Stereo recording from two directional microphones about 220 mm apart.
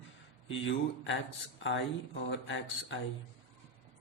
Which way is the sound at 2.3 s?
55° left (ahead or behind).